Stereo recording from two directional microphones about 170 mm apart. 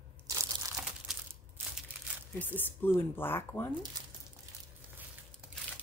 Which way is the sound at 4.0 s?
25° right (ahead or behind).